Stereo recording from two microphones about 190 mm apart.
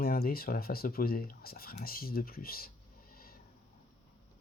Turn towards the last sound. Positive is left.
turn(degrees=50)  # may be behind; listen again after turning